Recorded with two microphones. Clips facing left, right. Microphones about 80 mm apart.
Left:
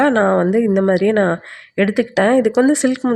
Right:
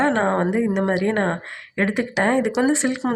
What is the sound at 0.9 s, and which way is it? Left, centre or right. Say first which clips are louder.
Speech: left 6 dB; left.